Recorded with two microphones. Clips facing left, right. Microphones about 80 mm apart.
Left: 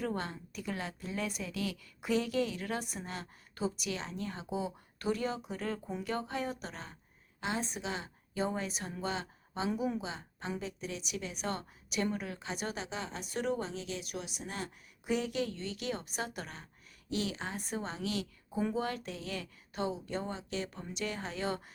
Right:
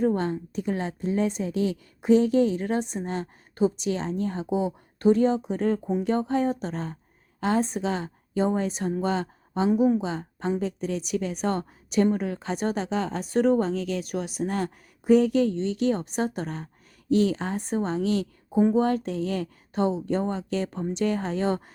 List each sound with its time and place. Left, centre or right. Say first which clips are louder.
0.0 s a woman's voice: right 12 dB; right
5.8 s a woman's voice: right 13 dB; right
6.1 s a woman's voice: right 11 dB; right
9.6 s a woman's voice: right 13 dB; right
10.1 s a woman's voice: right 12 dB; right